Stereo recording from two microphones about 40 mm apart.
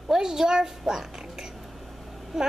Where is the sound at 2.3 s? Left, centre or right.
Centre.